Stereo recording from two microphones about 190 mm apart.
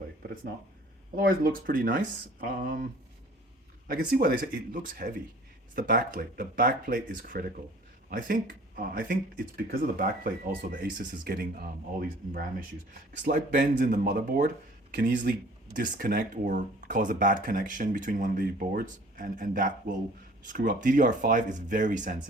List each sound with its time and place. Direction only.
1.1 s speech: 50° right (ahead or behind)
3.8 s speech: 50° right (ahead or behind)